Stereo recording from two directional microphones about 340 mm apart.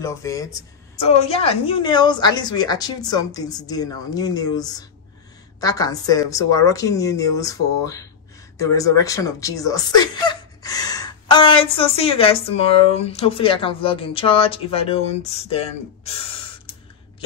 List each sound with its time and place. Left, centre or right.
0.0 s speech: centre